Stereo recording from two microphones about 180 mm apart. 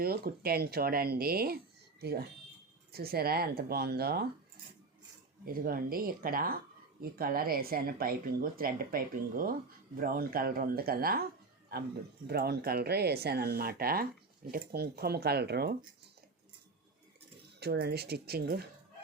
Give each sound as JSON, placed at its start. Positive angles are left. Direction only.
{"t": 0.0, "sound": "speech", "side_deg": -60}
{"t": 5.5, "sound": "speech", "side_deg": -50}
{"t": 12.3, "sound": "speech", "side_deg": -60}
{"t": 17.6, "sound": "speech", "side_deg": -60}